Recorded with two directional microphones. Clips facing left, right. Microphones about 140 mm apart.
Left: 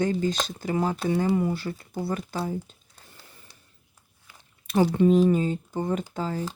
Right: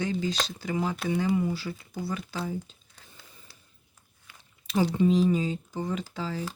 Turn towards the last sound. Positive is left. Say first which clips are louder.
# left 4 dB
turn(degrees=45)  # may be behind; listen again after turning